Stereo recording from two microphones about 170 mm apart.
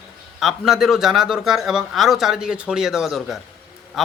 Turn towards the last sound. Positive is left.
turn(degrees=0)  # may be behind; listen again after turning